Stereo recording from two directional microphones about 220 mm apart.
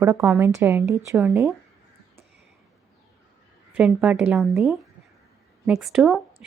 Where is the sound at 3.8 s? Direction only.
5° right (ahead or behind).